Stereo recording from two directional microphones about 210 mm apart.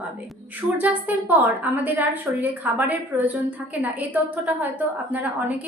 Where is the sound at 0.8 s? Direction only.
10° right (ahead or behind).